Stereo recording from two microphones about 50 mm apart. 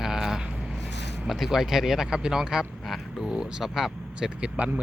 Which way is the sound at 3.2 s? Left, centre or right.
Centre.